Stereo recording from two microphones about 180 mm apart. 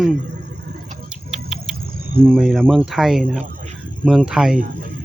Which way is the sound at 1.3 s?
5° right (ahead or behind).